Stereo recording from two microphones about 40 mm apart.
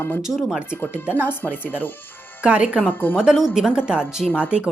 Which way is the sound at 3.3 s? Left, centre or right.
Centre.